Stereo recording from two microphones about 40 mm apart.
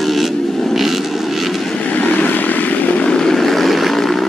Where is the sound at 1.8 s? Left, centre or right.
Left.